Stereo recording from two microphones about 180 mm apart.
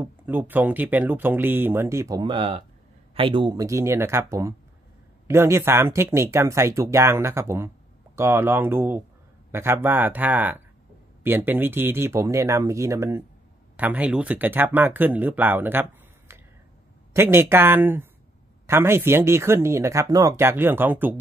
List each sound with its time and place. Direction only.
0.0 s speech: 10° right (ahead or behind)